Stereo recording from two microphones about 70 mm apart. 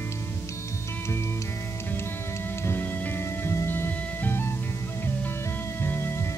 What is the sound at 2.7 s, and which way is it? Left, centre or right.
Music, left.